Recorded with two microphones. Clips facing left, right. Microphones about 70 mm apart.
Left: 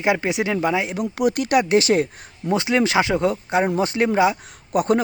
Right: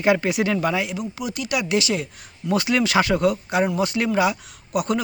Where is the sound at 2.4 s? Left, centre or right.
Left.